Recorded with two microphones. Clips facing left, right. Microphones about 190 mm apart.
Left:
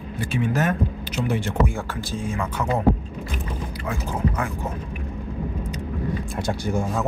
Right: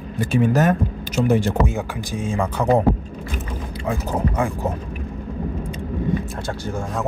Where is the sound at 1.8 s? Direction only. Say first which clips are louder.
Right 3 dB; 20° right (ahead or behind).